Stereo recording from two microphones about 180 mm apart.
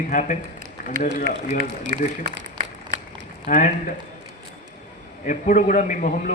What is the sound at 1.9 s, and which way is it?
Speech, 45° right (ahead or behind).